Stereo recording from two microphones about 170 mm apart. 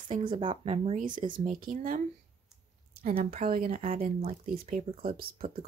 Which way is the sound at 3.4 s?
55° right (ahead or behind).